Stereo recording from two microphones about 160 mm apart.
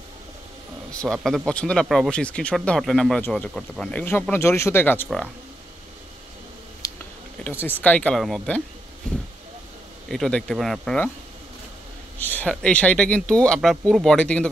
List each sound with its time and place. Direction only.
0.9 s speech: 5° left (ahead or behind)
6.8 s a sound: 20° left (ahead or behind)
7.4 s speech: 10° left (ahead or behind)
9.1 s a sound: 5° left (ahead or behind)
10.0 s speech: centre (ahead or behind)
12.2 s speech: 10° left (ahead or behind)